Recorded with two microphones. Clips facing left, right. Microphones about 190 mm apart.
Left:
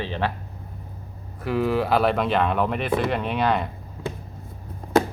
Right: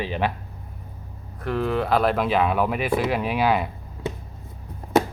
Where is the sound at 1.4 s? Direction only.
5° left (ahead or behind).